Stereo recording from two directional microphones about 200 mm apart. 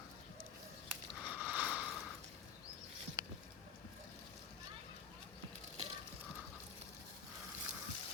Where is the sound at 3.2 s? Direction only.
20° right (ahead or behind).